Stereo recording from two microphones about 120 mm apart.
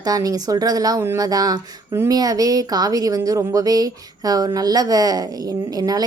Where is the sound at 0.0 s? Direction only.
30° right (ahead or behind).